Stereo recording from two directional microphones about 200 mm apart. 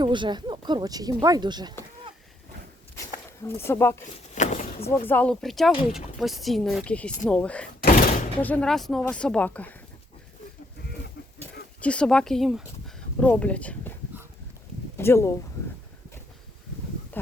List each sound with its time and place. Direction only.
0.0 s speech: 25° right (ahead or behind)
2.9 s a sound: 15° left (ahead or behind)
3.7 s speech: 10° left (ahead or behind)
4.4 s a sound: 35° left (ahead or behind)
4.9 s speech: 10° left (ahead or behind)
7.8 s door: 45° left (ahead or behind)
8.4 s speech: 5° left (ahead or behind)
11.8 s speech: 5° left (ahead or behind)
14.9 s speech: 10° left (ahead or behind)